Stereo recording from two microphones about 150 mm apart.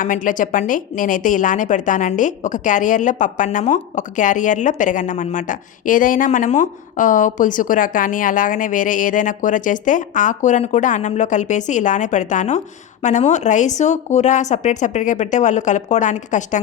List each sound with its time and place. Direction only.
0.0 s a woman's voice: 60° left (ahead or behind)